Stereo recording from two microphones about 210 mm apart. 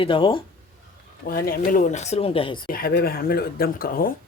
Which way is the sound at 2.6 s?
45° left (ahead or behind).